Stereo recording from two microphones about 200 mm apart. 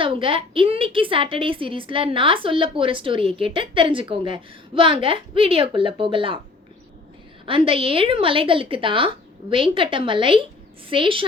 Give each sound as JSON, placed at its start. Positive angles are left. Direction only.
{"t": 0.0, "sound": "a woman's voice", "side_deg": -25}
{"t": 7.4, "sound": "a woman's voice", "side_deg": -25}